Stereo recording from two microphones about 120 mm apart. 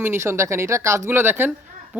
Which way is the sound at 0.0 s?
20° right (ahead or behind).